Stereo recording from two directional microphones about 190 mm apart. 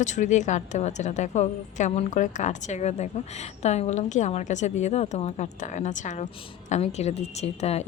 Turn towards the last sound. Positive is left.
turn(degrees=35)  # may be behind; listen again after turning